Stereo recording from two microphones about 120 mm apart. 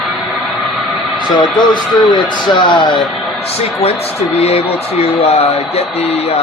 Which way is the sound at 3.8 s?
60° left (ahead or behind).